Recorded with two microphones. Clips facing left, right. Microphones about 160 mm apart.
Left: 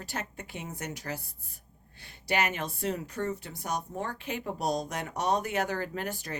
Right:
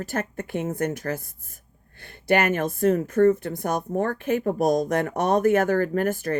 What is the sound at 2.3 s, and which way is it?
Speech, 50° right (ahead or behind).